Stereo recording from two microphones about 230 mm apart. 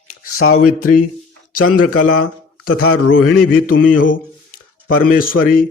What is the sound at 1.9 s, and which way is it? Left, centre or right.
Speech, left.